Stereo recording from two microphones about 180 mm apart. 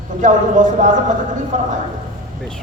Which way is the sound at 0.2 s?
45° right (ahead or behind).